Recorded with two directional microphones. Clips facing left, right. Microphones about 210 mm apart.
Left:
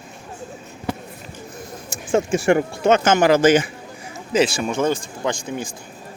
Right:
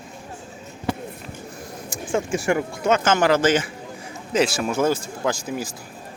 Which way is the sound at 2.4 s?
30° left (ahead or behind).